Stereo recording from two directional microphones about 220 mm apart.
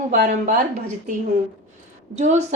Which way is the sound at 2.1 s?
30° right (ahead or behind).